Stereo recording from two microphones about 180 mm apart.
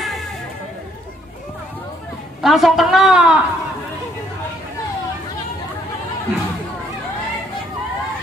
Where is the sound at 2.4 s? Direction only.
Centre (ahead or behind).